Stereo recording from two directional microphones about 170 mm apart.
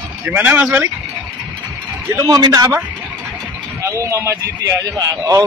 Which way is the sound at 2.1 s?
20° right (ahead or behind).